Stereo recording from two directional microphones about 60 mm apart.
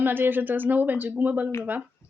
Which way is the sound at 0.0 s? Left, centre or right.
Right.